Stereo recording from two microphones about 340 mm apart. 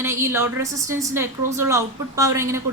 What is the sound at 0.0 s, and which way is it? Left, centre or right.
A woman's voice, centre.